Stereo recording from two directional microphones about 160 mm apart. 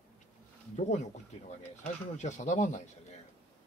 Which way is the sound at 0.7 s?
45° left (ahead or behind).